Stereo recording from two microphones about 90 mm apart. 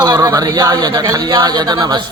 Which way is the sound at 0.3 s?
50° right (ahead or behind).